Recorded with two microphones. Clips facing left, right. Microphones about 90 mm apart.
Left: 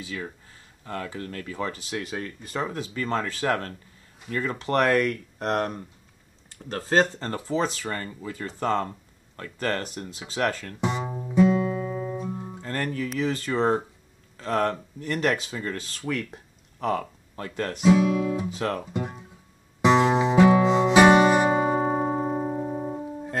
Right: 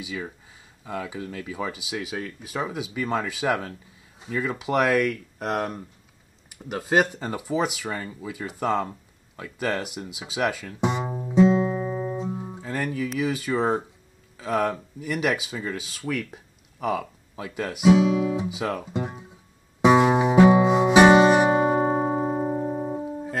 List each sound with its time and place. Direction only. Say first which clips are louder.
0.0 s speech: right 1 dB; 10° right (ahead or behind)
6.5 s speech: right 1 dB; 15° right (ahead or behind)
10.8 s music: right 3 dB; 20° right (ahead or behind)
12.3 s speech: right 2 dB; 5° right (ahead or behind)
17.9 s guitar: right 2 dB; 15° right (ahead or behind)
18.5 s speech: even; 5° right (ahead or behind)
18.9 s music: right 1 dB; 20° right (ahead or behind)